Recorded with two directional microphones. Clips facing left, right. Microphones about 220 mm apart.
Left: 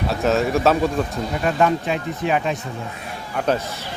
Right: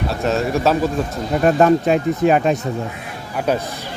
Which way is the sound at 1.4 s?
45° right (ahead or behind).